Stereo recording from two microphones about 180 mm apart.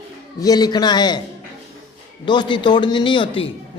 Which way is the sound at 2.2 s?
25° left (ahead or behind).